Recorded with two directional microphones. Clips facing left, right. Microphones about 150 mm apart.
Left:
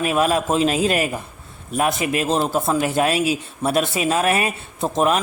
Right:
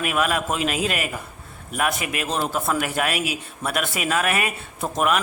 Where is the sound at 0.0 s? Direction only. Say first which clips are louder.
Left 4 dB; 30° left (ahead or behind).